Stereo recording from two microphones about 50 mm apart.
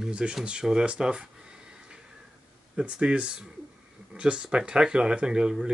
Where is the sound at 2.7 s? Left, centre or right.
Right.